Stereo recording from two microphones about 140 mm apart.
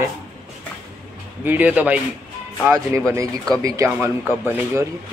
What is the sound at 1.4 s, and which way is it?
Speech, 10° right (ahead or behind).